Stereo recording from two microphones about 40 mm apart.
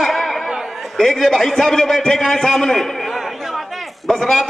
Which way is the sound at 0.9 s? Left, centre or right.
Centre.